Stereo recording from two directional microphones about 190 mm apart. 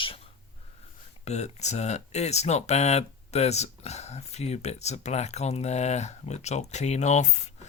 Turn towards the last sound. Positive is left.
turn(degrees=35)  # may be behind; listen again after turning